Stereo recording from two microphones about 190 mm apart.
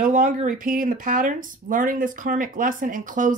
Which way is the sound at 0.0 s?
45° right (ahead or behind).